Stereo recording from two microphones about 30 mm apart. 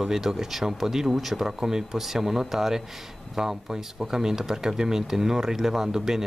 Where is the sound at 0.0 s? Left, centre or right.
Centre.